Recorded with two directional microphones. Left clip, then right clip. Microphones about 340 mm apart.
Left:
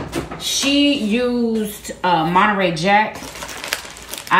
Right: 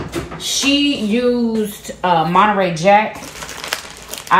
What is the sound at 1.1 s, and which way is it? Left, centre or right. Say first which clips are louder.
Speech: right 3 dB; centre.